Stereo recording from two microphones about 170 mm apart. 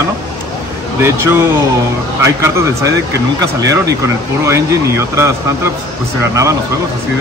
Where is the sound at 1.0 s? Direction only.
15° right (ahead or behind).